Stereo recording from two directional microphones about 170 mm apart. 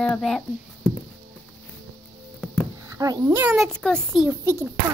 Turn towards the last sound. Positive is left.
turn(degrees=-15)  # may be behind; listen again after turning